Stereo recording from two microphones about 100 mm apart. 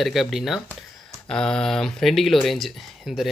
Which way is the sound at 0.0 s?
Centre (ahead or behind).